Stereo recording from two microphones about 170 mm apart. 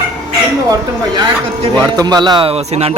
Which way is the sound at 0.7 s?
25° right (ahead or behind).